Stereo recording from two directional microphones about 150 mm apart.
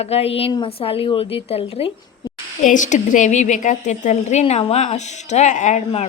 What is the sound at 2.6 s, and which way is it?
Speech, 55° left (ahead or behind).